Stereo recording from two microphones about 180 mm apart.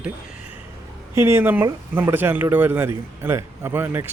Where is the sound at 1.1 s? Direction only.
15° right (ahead or behind).